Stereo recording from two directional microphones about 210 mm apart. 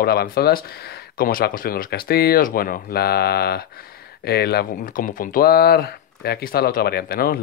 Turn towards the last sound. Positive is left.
turn(degrees=45)  # may be behind; listen again after turning